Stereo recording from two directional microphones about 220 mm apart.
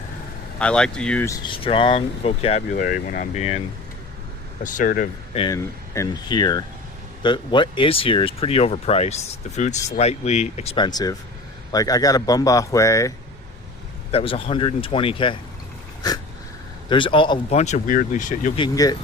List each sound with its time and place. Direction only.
0.6 s speech: 5° left (ahead or behind)
1.5 s speech: 25° left (ahead or behind)
4.6 s speech: 35° left (ahead or behind)
5.4 s speech: 15° left (ahead or behind)
14.1 s speech: 25° left (ahead or behind)
16.9 s speech: 20° left (ahead or behind)
18.6 s speech: 15° left (ahead or behind)